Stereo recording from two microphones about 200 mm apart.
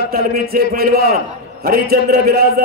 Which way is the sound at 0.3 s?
50° right (ahead or behind).